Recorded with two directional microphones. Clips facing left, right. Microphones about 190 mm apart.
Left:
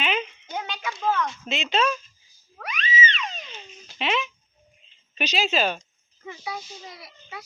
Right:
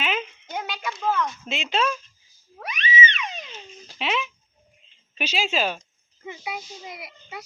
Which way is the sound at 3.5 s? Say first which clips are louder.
Right 2 dB; centre (ahead or behind).